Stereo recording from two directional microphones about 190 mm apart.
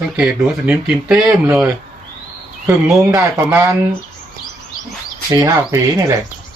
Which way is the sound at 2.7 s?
10° right (ahead or behind).